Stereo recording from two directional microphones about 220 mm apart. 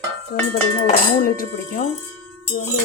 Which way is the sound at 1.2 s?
40° left (ahead or behind).